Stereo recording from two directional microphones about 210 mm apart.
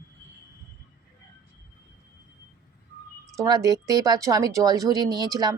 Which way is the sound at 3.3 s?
15° right (ahead or behind).